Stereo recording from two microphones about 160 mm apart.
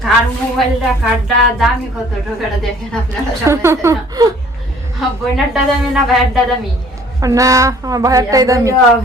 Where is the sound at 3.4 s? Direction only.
15° right (ahead or behind).